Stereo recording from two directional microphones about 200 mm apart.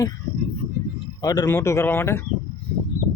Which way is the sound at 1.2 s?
20° left (ahead or behind).